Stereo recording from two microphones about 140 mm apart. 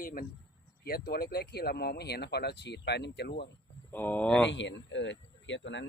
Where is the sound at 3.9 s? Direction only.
10° left (ahead or behind).